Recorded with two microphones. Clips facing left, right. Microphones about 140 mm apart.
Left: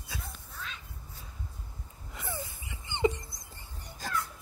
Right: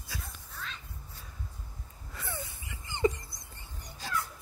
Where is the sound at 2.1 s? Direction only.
25° left (ahead or behind).